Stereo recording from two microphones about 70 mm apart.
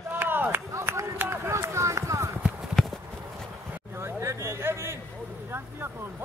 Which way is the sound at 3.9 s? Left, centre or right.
Right.